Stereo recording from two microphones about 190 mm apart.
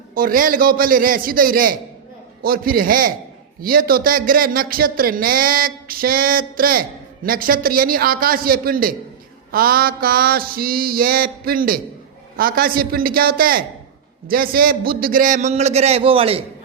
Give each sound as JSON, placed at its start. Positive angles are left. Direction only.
{"t": 0.1, "sound": "a man's voice", "side_deg": -45}